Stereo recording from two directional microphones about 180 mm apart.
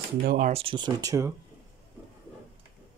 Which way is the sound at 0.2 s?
55° right (ahead or behind).